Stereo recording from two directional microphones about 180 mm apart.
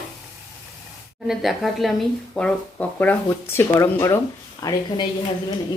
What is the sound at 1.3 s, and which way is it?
A woman's voice, centre (ahead or behind).